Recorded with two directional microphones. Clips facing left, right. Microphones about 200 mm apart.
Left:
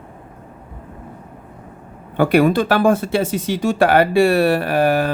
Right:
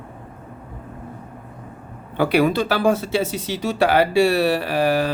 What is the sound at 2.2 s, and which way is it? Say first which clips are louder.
Speech: left 3 dB; 50° left (ahead or behind).